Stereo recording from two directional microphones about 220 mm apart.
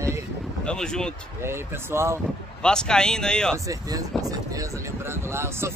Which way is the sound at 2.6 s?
5° left (ahead or behind).